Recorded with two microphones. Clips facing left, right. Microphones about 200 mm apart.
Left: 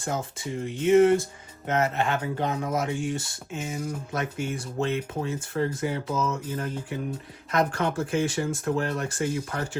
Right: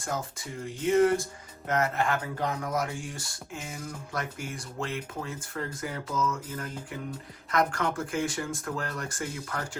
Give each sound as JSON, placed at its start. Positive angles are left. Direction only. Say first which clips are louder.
{"t": 0.0, "sound": "speech", "louder": "left 4 dB", "side_deg": 25}